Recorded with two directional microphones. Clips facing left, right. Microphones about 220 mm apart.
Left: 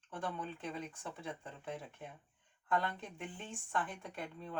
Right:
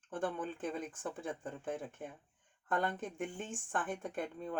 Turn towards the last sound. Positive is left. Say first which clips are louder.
# right 6 dB
turn(degrees=-50)  # may be behind; listen again after turning